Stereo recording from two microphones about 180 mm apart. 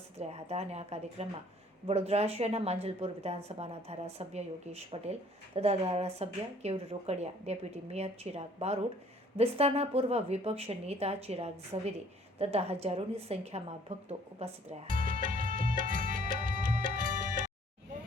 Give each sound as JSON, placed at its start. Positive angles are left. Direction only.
{"t": 0.2, "sound": "a woman's voice", "side_deg": -35}
{"t": 15.8, "sound": "music", "side_deg": -50}